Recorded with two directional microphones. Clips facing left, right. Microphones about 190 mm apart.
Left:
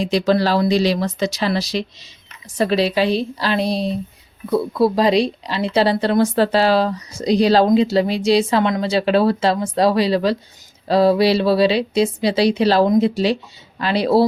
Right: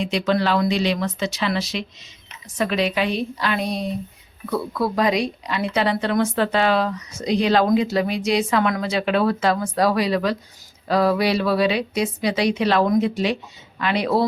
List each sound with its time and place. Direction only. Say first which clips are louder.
0.0 s speech: left 4 dB; 35° left (ahead or behind)